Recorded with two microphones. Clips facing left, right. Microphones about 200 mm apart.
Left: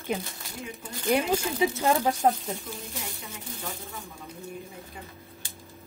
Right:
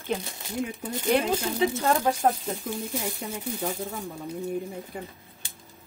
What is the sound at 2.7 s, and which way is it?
Speech, 50° right (ahead or behind).